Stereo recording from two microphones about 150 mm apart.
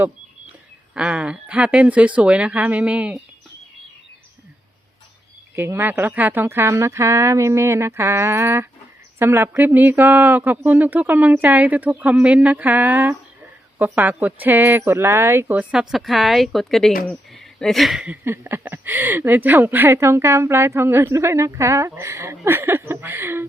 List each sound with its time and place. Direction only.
0.9 s speech: 10° right (ahead or behind)
5.5 s speech: 15° right (ahead or behind)